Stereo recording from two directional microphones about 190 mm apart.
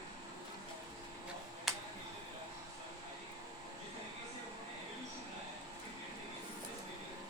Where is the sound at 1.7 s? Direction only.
Centre (ahead or behind).